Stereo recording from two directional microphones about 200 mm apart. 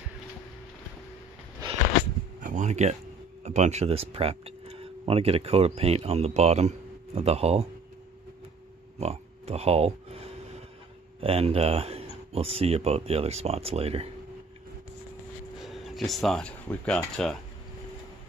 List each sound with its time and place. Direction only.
2.4 s a sound: 35° right (ahead or behind)
3.4 s speech: 35° right (ahead or behind)
8.9 s oink: 30° right (ahead or behind)
11.1 s speech: 30° right (ahead or behind)
15.6 s speech: centre (ahead or behind)